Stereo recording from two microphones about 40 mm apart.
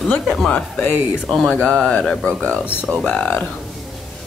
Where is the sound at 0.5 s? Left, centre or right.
Left.